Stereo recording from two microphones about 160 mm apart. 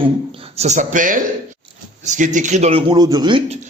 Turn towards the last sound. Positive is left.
turn(degrees=-25)  # may be behind; listen again after turning